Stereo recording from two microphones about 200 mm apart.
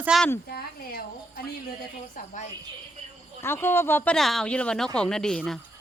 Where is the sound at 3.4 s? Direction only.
10° left (ahead or behind).